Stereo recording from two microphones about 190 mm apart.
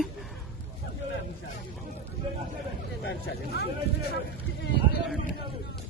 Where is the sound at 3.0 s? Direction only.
60° left (ahead or behind).